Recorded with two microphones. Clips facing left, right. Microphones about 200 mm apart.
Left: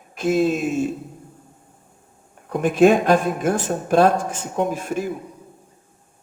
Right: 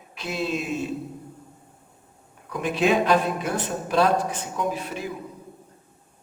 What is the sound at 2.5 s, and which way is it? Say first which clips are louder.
A man's voice: left 7 dB; 50° left (ahead or behind).